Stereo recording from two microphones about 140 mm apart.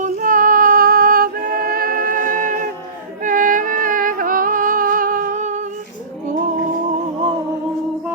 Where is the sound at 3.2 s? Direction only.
70° right (ahead or behind).